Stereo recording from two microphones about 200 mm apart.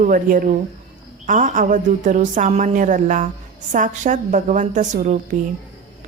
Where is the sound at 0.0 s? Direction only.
45° right (ahead or behind).